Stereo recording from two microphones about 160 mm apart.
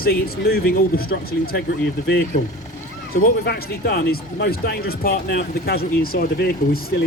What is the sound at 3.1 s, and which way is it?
Speech, 70° left (ahead or behind).